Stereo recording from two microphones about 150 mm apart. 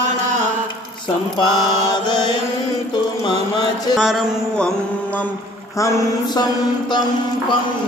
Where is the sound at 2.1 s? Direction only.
30° left (ahead or behind).